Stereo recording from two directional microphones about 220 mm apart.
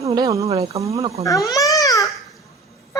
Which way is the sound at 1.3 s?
15° left (ahead or behind).